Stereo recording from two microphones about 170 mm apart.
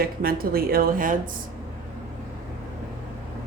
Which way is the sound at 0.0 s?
60° right (ahead or behind).